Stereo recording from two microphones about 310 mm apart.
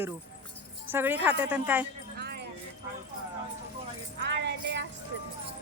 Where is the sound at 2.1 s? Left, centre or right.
Right.